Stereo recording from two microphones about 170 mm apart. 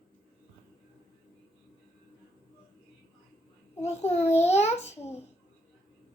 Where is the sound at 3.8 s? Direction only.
40° left (ahead or behind).